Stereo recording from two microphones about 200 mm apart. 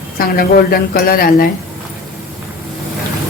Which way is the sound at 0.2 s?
45° left (ahead or behind).